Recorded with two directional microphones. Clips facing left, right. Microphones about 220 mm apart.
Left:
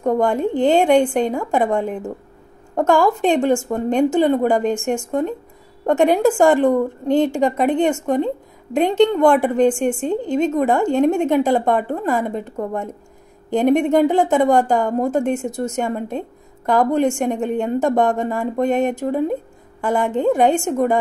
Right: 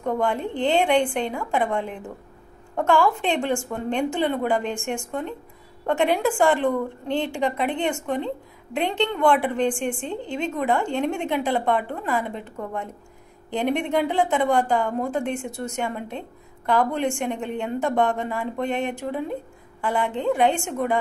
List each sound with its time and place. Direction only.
0.0 s a woman's voice: 45° left (ahead or behind)